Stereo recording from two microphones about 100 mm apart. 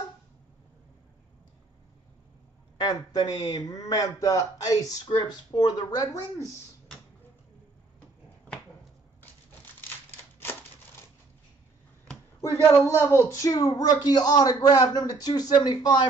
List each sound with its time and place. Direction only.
2.8 s speech: 40° left (ahead or behind)
5.0 s speech: 50° left (ahead or behind); by 6.5 s 35° left (ahead or behind)
12.9 s speech: 20° left (ahead or behind); by 16.1 s 45° left (ahead or behind)